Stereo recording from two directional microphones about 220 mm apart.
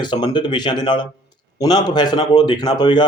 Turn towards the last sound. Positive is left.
turn(degrees=20)  # may be behind; listen again after turning